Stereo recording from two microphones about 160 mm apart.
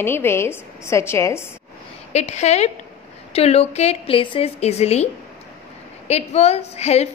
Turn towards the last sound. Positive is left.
turn(degrees=40)  # may be behind; listen again after turning